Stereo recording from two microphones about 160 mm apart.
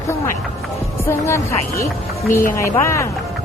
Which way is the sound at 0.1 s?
15° left (ahead or behind).